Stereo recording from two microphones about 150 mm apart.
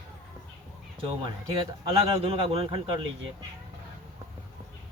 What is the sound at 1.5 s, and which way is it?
Speech, 35° right (ahead or behind).